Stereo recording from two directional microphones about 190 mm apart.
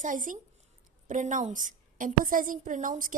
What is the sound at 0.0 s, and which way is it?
A woman's voice, 45° right (ahead or behind).